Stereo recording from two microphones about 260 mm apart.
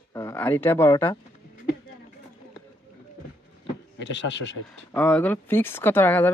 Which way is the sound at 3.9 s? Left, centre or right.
Left.